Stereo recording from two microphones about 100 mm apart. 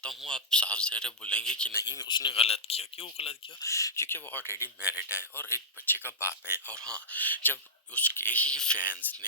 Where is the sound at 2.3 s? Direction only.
75° left (ahead or behind).